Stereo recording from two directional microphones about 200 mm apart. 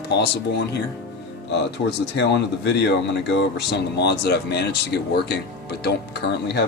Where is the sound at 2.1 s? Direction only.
60° left (ahead or behind).